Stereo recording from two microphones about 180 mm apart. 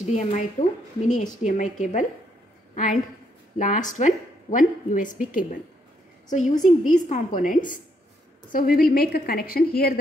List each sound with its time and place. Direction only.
0.0 s a woman's voice: 40° left (ahead or behind)
6.6 s a woman's voice: 45° left (ahead or behind)